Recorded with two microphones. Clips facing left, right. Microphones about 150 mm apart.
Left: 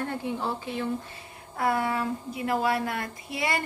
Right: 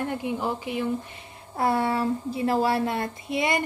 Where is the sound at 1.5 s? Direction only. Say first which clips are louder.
Right 3 dB; 30° right (ahead or behind).